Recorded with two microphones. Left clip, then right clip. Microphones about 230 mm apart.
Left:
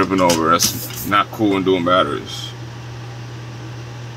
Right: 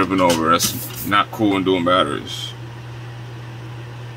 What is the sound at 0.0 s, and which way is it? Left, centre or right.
Speech, centre.